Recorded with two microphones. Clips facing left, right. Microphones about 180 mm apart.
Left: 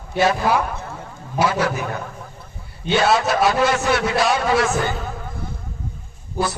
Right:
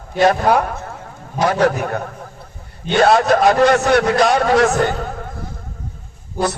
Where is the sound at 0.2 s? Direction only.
60° right (ahead or behind).